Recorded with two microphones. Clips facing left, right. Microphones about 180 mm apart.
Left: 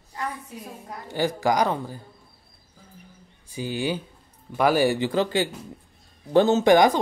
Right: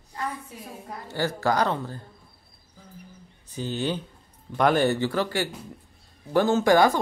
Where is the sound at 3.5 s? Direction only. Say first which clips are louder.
Left 1 dB; 10° left (ahead or behind).